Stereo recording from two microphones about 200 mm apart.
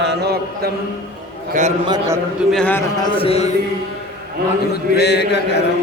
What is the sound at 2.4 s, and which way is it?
Speech, 5° left (ahead or behind).